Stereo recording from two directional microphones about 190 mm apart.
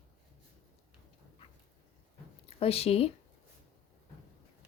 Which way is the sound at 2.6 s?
30° left (ahead or behind).